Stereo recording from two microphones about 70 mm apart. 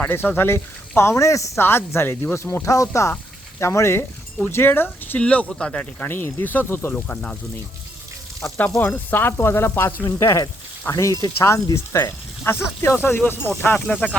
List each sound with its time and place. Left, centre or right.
0.0 s speech: left
1.6 s speech: left
4.4 s speech: left
5.2 s speech: centre
6.0 s speech: left
6.9 s speech: centre
8.8 s speech: left
11.3 s speech: left
13.7 s speech: centre